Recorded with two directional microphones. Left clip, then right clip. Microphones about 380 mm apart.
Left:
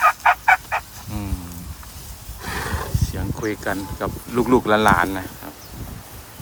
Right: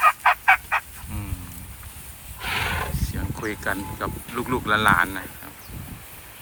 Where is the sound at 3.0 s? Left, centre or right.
Centre.